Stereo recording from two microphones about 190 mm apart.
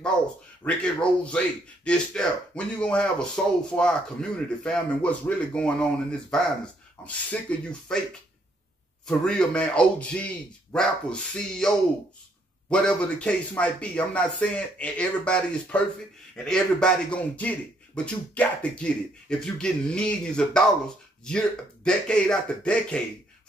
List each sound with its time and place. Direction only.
0.7 s speech: 5° left (ahead or behind)
9.0 s speech: 5° left (ahead or behind)